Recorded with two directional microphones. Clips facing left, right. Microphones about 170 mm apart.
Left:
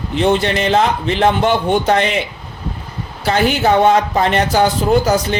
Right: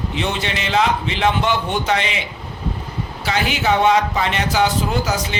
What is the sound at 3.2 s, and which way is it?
Speech, 50° left (ahead or behind).